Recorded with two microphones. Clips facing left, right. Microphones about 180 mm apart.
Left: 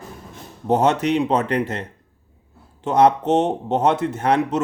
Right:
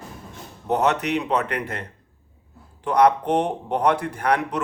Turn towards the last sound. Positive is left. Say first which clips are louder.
# left 4 dB
turn(degrees=25)  # may be behind; listen again after turning